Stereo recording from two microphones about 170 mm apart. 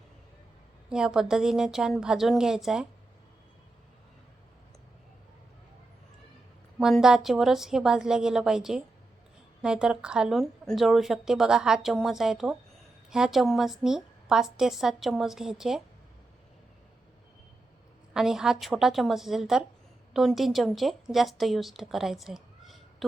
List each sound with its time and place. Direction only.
0.9 s a woman's voice: 5° right (ahead or behind)
6.7 s a woman's voice: centre (ahead or behind)
18.1 s a woman's voice: 5° right (ahead or behind)